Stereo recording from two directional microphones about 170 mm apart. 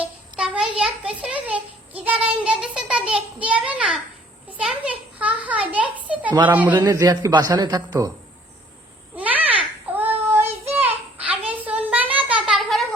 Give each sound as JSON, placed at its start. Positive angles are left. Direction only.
{"t": 0.3, "sound": "a child's voice", "side_deg": -5}
{"t": 6.8, "sound": "a man's voice", "side_deg": -25}
{"t": 9.1, "sound": "babbling", "side_deg": -10}
{"t": 9.9, "sound": "child singing", "side_deg": -10}
{"t": 10.8, "sound": "a sound", "side_deg": -10}